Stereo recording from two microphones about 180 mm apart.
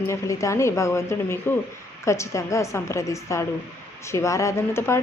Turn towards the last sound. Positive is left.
turn(degrees=15)  # may be behind; listen again after turning